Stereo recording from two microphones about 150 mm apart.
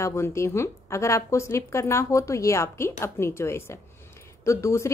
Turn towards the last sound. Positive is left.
turn(degrees=20)  # may be behind; listen again after turning